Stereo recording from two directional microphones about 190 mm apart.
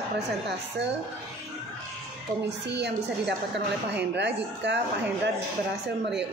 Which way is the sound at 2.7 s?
65° right (ahead or behind).